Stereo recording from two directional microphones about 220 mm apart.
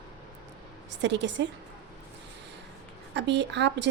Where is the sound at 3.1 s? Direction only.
50° right (ahead or behind).